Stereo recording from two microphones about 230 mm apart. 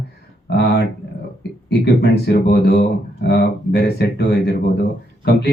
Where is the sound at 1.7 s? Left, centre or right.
Left.